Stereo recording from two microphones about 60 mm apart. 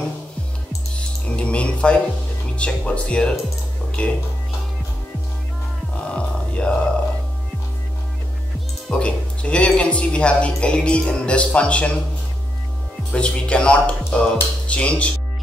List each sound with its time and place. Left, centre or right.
0.9 s music: centre
2.5 s speech: centre
6.0 s music: centre
8.9 s speech: centre
13.1 s speech: centre